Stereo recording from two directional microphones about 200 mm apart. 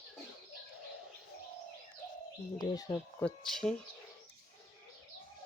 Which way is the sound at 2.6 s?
20° left (ahead or behind).